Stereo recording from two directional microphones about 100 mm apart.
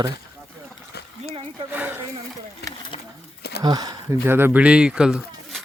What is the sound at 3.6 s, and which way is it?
Speech, 45° right (ahead or behind).